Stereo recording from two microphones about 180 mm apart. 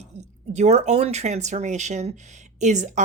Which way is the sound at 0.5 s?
40° right (ahead or behind).